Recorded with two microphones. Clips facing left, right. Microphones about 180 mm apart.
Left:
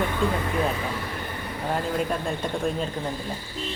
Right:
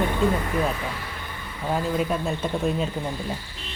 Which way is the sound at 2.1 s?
5° right (ahead or behind).